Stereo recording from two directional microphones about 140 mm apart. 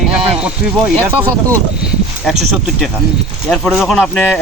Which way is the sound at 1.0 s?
15° right (ahead or behind).